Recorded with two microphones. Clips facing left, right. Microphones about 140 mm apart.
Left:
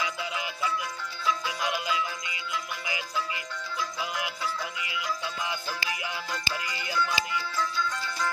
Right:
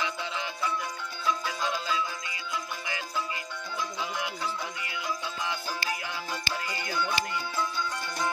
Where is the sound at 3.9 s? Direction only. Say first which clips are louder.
Even; 5° left (ahead or behind).